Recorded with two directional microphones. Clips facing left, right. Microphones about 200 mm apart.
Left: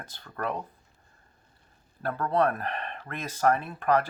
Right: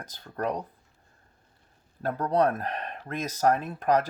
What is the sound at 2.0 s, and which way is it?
Speech, 40° right (ahead or behind).